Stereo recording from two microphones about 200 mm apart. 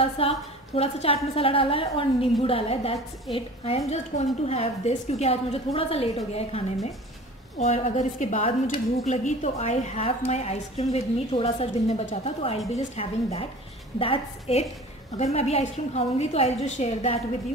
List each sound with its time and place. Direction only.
0.0 s a woman's voice: 30° left (ahead or behind)